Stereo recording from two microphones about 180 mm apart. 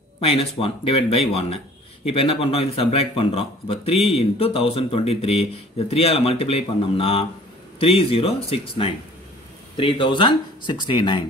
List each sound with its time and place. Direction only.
0.2 s speech: 35° left (ahead or behind)